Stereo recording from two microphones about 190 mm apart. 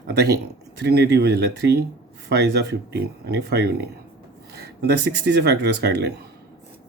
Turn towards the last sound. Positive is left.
turn(degrees=-60)  # may be behind; listen again after turning